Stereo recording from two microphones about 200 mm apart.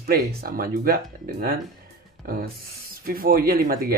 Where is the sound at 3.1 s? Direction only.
50° right (ahead or behind).